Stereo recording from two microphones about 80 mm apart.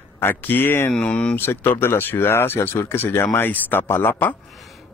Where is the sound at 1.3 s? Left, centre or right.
Left.